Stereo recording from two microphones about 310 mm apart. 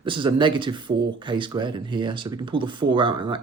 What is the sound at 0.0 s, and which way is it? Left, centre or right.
Speech, centre.